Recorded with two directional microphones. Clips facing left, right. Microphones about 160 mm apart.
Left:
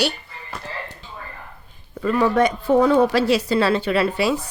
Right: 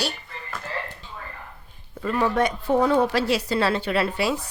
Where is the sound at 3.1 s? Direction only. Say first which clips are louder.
Left 4 dB; 90° left.